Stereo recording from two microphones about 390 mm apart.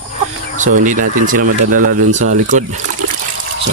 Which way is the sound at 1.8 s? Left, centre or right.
Right.